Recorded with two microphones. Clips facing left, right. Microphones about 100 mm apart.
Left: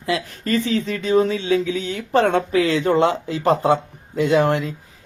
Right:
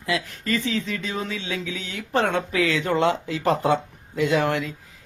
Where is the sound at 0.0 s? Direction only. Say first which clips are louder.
Left 3 dB; 35° left (ahead or behind).